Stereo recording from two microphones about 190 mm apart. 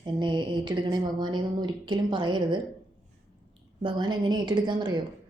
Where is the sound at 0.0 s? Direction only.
25° right (ahead or behind).